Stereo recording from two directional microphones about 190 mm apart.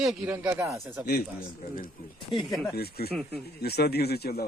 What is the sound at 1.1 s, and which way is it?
Speech, 55° left (ahead or behind).